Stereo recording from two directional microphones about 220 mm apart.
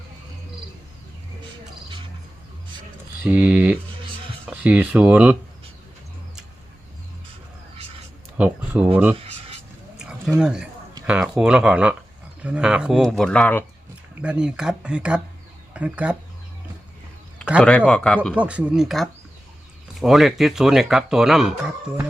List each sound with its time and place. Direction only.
3.2 s speech: 5° right (ahead or behind)
8.4 s speech: 5° right (ahead or behind)
9.1 s a sound: 25° right (ahead or behind)
10.0 s a sound: 5° right (ahead or behind)
11.0 s speech: 5° right (ahead or behind)
14.2 s speech: 5° right (ahead or behind)
17.6 s speech: 5° left (ahead or behind)
18.3 s speech: 5° right (ahead or behind)